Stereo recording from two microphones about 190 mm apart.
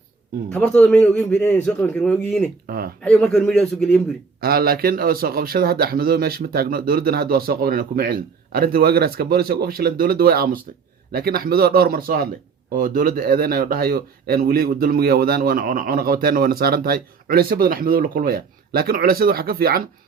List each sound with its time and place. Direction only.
0.5 s a man's voice: 5° left (ahead or behind)
2.6 s speech: 50° right (ahead or behind)
3.0 s a man's voice: 5° left (ahead or behind)
4.4 s speech: 50° right (ahead or behind)